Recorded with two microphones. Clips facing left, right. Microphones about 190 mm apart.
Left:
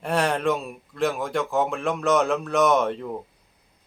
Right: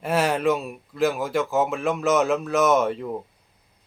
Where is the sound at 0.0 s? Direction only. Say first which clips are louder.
Right 1 dB; 5° right (ahead or behind).